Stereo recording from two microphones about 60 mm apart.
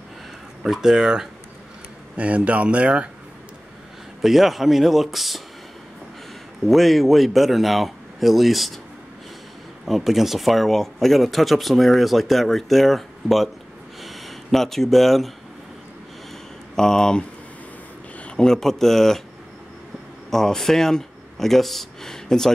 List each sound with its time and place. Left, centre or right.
0.7 s speech: centre
2.1 s speech: right
4.2 s speech: centre
6.6 s speech: centre
9.8 s speech: centre
16.7 s speech: centre
18.2 s speech: centre
20.2 s speech: centre